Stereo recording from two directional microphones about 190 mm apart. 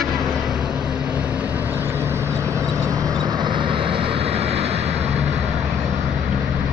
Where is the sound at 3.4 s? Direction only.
25° right (ahead or behind).